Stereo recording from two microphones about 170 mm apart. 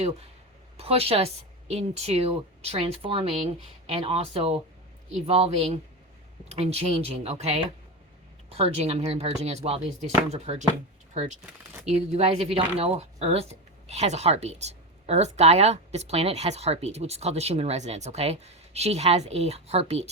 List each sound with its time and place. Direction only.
0.8 s speech: 35° right (ahead or behind)